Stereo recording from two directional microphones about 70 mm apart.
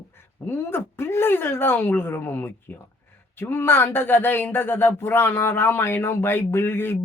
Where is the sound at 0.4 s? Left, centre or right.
Left.